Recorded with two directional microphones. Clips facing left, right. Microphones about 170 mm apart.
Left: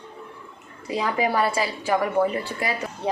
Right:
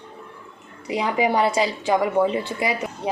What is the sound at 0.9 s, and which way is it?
A woman's voice, 15° right (ahead or behind).